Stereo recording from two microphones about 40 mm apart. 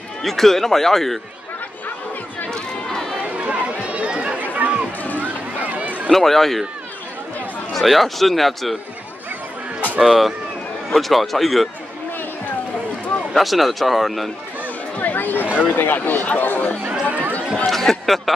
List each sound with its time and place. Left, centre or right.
0.2 s speech: centre
2.5 s crowd: centre
3.3 s run: right
4.4 s run: right
6.1 s speech: centre
7.7 s a man's voice: centre
10.0 s a man's voice: centre
13.3 s a man's voice: centre
15.0 s chatter: left
15.5 s speech: left
17.6 s speech: centre